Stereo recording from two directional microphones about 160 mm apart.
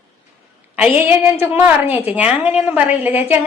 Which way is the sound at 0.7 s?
10° right (ahead or behind).